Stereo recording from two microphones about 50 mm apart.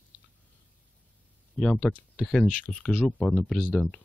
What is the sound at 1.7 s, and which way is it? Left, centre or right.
Speech, left.